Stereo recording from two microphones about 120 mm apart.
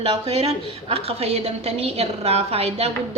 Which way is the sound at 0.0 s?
55° right (ahead or behind).